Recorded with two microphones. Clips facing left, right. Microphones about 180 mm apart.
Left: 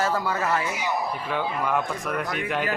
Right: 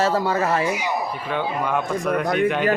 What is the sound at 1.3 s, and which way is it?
Speech, 5° left (ahead or behind).